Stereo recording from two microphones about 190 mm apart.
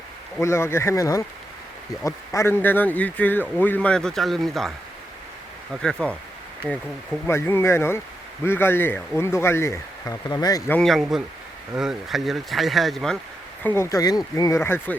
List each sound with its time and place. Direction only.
0.4 s speech: 15° left (ahead or behind)
5.7 s speech: 5° left (ahead or behind); by 10.8 s 20° left (ahead or behind)
10.8 s speech: centre (ahead or behind)
13.6 s speech: 10° left (ahead or behind)